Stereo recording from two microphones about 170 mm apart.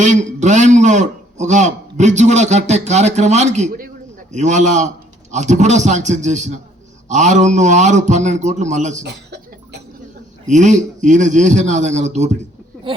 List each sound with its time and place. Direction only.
0.0 s a man's voice: 45° right (ahead or behind)
9.0 s cough: 80° right
10.4 s a man's voice: 45° right (ahead or behind)